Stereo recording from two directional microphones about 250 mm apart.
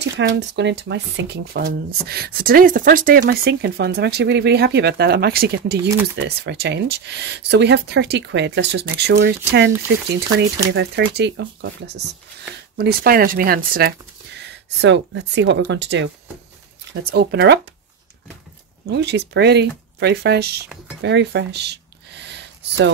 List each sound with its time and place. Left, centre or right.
0.0 s speech: right
18.9 s speech: right